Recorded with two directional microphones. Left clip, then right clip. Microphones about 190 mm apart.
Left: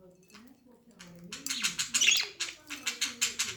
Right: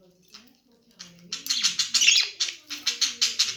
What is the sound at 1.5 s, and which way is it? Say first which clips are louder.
Bird: right 8 dB; 25° left (ahead or behind).